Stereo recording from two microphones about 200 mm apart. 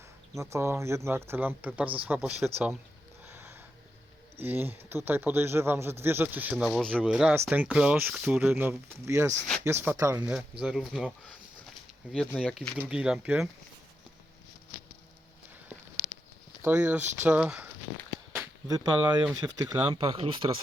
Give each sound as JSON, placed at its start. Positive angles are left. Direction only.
{"t": 0.3, "sound": "speech", "side_deg": -15}
{"t": 3.2, "sound": "a sound", "side_deg": -10}
{"t": 4.4, "sound": "speech", "side_deg": -10}
{"t": 12.1, "sound": "speech", "side_deg": 5}
{"t": 16.6, "sound": "speech", "side_deg": -10}